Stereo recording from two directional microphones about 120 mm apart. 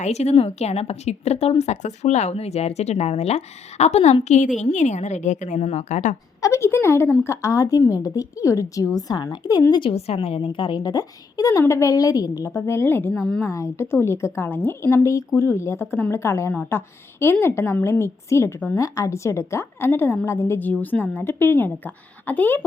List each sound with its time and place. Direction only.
0.0 s a woman's voice: 65° left (ahead or behind); by 6.1 s 85° left
6.4 s a woman's voice: 25° left (ahead or behind)
9.8 s a woman's voice: 50° left (ahead or behind); by 13.5 s 10° left (ahead or behind)
13.5 s a woman's voice: 25° left (ahead or behind)